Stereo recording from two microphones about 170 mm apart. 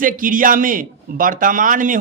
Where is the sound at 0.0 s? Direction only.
55° right (ahead or behind).